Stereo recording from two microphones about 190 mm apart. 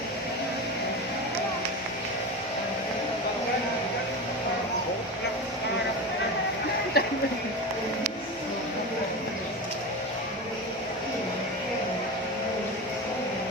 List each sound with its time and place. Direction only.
7.0 s music: 55° left (ahead or behind)